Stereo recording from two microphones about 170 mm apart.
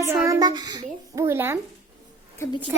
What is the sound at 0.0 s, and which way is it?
Child singing, 20° right (ahead or behind).